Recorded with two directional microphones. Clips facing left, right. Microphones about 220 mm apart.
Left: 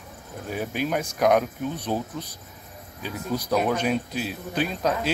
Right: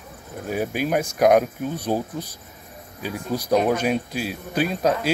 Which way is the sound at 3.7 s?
10° right (ahead or behind).